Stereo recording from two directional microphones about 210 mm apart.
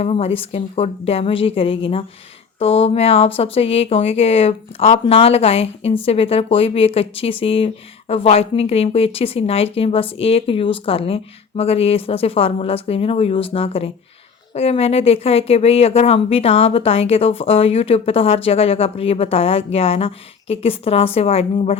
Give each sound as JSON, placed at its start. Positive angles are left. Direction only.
{"t": 0.0, "sound": "speech", "side_deg": 30}